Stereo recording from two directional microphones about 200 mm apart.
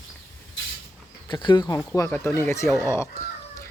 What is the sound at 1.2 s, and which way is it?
Speech, 20° left (ahead or behind).